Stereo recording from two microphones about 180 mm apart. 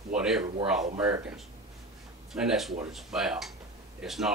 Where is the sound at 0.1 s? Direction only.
5° right (ahead or behind).